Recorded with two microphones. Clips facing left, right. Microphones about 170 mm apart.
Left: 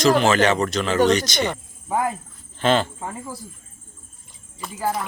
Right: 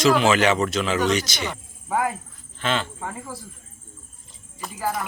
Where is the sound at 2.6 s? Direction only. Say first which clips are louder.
Left 6 dB; 35° left (ahead or behind).